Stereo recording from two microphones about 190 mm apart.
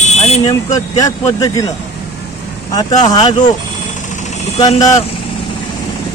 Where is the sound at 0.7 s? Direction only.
20° left (ahead or behind).